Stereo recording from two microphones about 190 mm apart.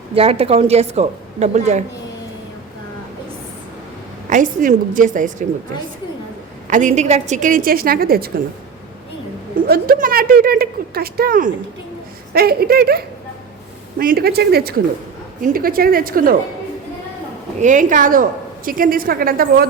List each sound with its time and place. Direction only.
0.1 s a woman's voice: 30° right (ahead or behind)
4.3 s a woman's voice: 45° right (ahead or behind)
6.7 s a woman's voice: 40° right (ahead or behind)
9.6 s a woman's voice: 55° right (ahead or behind)
14.0 s a woman's voice: 50° right (ahead or behind)
17.6 s a woman's voice: 40° right (ahead or behind)